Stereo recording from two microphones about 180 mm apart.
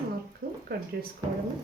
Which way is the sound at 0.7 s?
60° right (ahead or behind).